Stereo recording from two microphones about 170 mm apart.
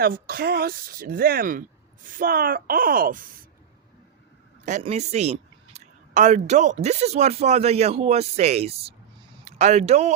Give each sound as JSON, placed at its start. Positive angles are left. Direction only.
{"t": 0.0, "sound": "speech", "side_deg": -65}
{"t": 4.8, "sound": "speech", "side_deg": -40}